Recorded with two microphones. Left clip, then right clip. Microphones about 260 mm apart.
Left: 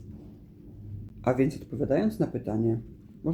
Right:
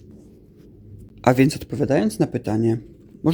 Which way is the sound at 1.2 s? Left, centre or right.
Right.